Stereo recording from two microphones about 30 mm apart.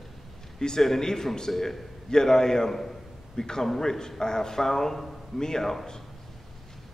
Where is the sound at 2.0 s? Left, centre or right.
Centre.